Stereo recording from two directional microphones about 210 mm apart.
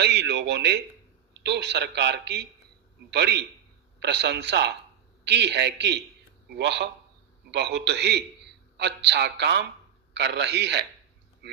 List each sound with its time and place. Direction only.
0.0 s a man's voice: 55° right (ahead or behind)